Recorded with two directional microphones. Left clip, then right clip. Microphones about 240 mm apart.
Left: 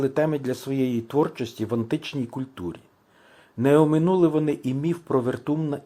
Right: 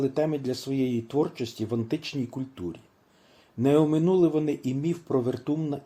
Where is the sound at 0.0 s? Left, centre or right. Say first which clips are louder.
Left 3 dB; centre.